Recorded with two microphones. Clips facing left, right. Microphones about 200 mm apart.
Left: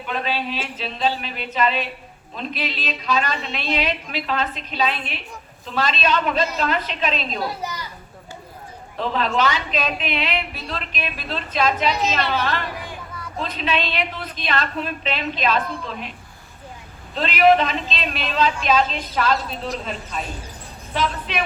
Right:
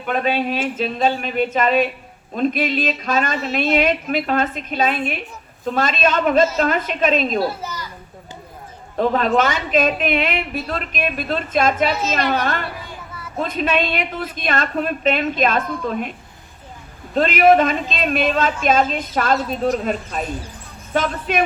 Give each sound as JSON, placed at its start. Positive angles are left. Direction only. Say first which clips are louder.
{"t": 0.0, "sound": "speech", "louder": "right 6 dB", "side_deg": -50}
{"t": 7.6, "sound": "a child's voice", "louder": "even", "side_deg": 15}
{"t": 9.0, "sound": "speech", "louder": "right 5 dB", "side_deg": -50}
{"t": 17.2, "sound": "speech", "louder": "right 3 dB", "side_deg": -50}